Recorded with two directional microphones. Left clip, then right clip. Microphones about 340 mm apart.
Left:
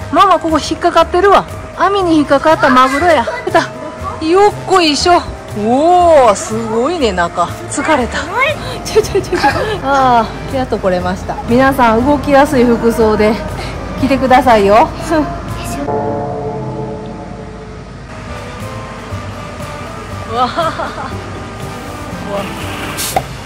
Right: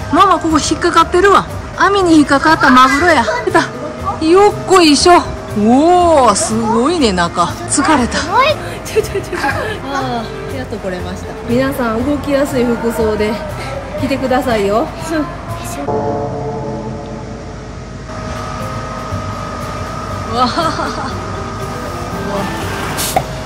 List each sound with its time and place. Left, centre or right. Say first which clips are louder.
0.1 s speech: left 1 dB; centre
9.0 s speech: left 4 dB; centre
20.3 s speech: even; centre